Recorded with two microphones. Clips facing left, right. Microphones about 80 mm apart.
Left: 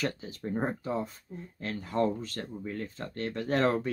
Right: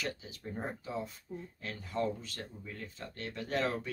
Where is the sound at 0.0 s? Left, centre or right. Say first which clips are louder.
Left 6 dB; left.